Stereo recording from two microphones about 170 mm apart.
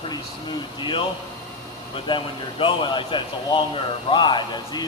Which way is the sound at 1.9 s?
30° left (ahead or behind).